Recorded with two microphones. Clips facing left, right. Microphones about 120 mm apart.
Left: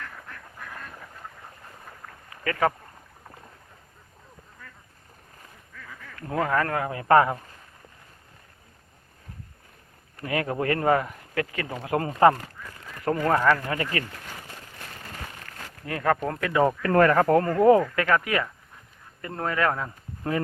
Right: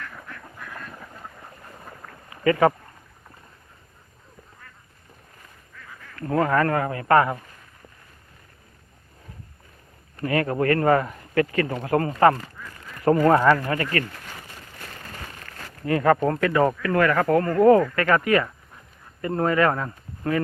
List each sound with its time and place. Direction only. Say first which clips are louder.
2.3 s speech: right 6 dB; 10° right (ahead or behind)
6.1 s speech: right 4 dB; 5° left (ahead or behind)
6.9 s speech: left 2 dB; 15° left (ahead or behind)
10.2 s speech: right 4 dB; 10° left (ahead or behind)
13.2 s speech: right 3 dB; 10° right (ahead or behind)
13.7 s speech: right 3 dB; 15° left (ahead or behind)
15.8 s speech: right 6 dB; centre (ahead or behind)
16.8 s speech: left 1 dB; 35° left (ahead or behind)
17.5 s speech: right 5 dB; 15° left (ahead or behind)